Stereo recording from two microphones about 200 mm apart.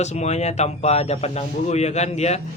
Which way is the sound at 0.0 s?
35° left (ahead or behind).